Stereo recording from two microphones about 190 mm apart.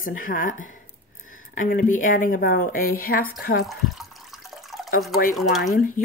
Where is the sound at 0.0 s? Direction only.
45° left (ahead or behind).